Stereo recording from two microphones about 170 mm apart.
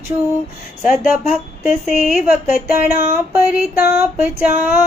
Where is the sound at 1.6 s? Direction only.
5° right (ahead or behind).